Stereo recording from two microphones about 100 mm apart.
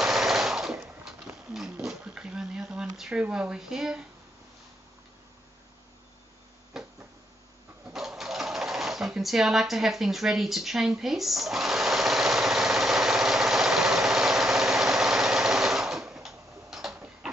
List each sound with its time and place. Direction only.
0.0 s machine gun: 5° right (ahead or behind)
1.0 s a sound: 5° right (ahead or behind)
3.0 s speech: 10° right (ahead or behind)
6.7 s cupboard open or close: 5° right (ahead or behind)
7.9 s sewing machine: 5° right (ahead or behind)